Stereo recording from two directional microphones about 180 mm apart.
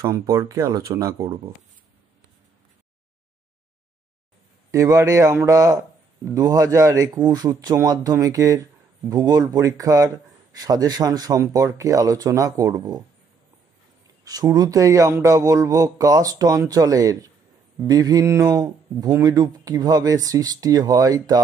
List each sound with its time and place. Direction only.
0.0 s speech: 15° right (ahead or behind)
4.6 s a man's voice: 20° right (ahead or behind)
14.2 s a man's voice: 20° right (ahead or behind)